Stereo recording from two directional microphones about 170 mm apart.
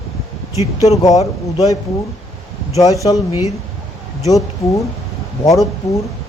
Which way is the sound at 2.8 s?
20° left (ahead or behind).